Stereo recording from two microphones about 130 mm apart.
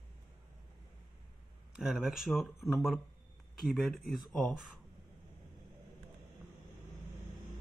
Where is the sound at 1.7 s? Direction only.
5° right (ahead or behind).